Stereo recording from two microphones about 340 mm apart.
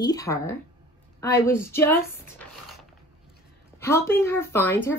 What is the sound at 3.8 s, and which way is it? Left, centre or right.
Speech, centre.